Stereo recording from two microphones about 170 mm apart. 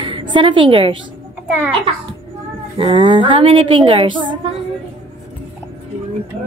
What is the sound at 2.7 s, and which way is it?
A woman's voice, 30° right (ahead or behind).